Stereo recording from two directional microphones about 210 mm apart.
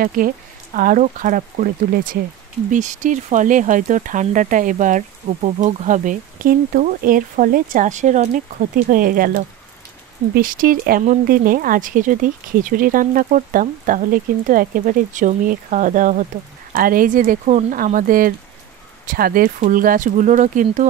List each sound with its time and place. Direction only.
0.0 s speech: 40° right (ahead or behind)
2.7 s speech: 35° right (ahead or behind)